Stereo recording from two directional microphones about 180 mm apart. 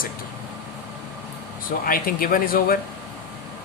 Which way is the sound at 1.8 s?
55° left (ahead or behind).